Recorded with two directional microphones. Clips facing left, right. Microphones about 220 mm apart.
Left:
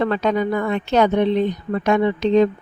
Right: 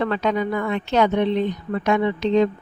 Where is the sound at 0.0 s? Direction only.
40° left (ahead or behind).